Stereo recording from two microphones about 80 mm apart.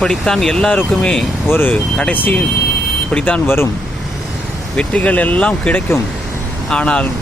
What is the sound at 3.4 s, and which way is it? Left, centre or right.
Speech, left.